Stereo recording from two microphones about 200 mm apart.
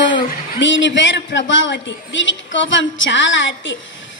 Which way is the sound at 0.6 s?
65° left (ahead or behind).